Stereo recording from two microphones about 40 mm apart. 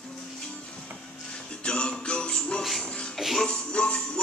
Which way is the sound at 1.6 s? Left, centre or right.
Left.